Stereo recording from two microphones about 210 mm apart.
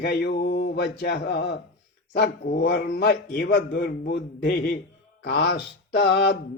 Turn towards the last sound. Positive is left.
turn(degrees=50)  # may be behind; listen again after turning